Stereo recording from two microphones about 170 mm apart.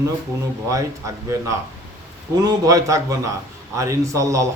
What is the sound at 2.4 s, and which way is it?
A man's voice, 20° right (ahead or behind).